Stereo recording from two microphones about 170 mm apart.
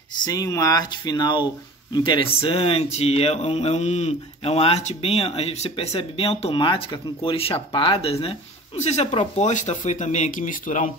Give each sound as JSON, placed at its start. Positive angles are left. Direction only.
{"t": 0.2, "sound": "speech", "side_deg": 20}